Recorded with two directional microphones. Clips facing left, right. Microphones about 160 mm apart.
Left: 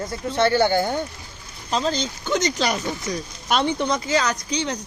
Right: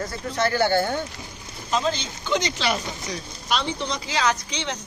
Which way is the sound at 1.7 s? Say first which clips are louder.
Left 1 dB; 45° left (ahead or behind).